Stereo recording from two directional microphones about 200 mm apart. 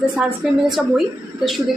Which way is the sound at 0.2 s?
Centre (ahead or behind).